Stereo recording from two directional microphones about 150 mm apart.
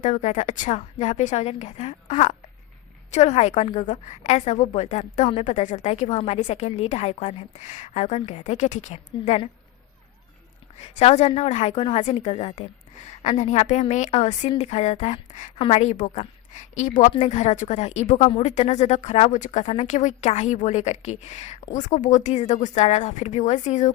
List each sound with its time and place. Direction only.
0.0 s speech: 55° left (ahead or behind)
10.8 s speech: 45° left (ahead or behind)